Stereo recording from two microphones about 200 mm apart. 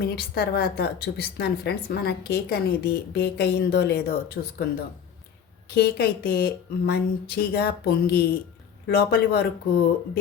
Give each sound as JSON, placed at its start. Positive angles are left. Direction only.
{"t": 0.0, "sound": "a woman's voice", "side_deg": 50}
{"t": 5.7, "sound": "a woman's voice", "side_deg": 55}